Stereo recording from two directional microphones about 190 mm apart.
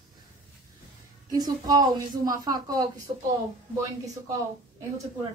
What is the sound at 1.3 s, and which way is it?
A woman's voice, 20° right (ahead or behind).